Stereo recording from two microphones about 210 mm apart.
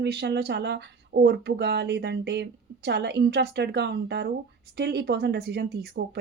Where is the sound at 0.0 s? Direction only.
55° right (ahead or behind).